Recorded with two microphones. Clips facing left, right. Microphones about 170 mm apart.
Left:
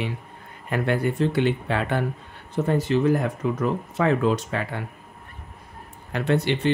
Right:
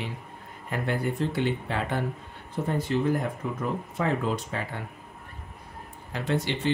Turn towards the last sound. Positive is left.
turn(degrees=65)  # may be behind; listen again after turning